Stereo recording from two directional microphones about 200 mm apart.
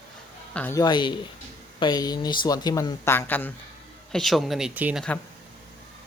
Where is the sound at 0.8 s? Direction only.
20° left (ahead or behind); by 5.0 s 5° right (ahead or behind).